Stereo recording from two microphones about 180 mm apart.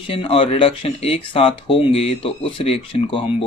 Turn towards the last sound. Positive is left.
turn(degrees=30)  # may be behind; listen again after turning